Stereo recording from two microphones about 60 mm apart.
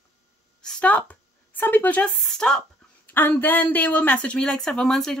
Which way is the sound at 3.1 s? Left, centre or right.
Left.